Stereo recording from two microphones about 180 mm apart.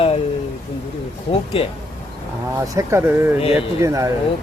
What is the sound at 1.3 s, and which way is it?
Speech, 30° left (ahead or behind).